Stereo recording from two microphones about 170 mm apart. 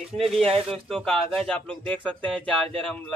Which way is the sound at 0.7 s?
Centre (ahead or behind).